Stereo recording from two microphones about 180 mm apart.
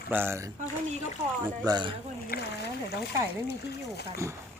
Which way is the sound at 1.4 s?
25° right (ahead or behind).